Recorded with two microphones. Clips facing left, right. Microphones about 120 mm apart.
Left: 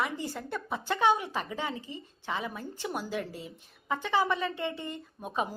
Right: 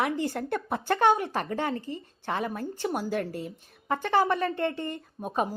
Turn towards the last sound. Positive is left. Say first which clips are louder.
# right 4 dB
turn(degrees=-45)  # may be behind; listen again after turning